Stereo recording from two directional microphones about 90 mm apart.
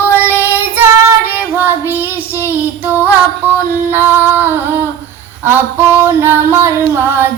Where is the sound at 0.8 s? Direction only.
20° right (ahead or behind).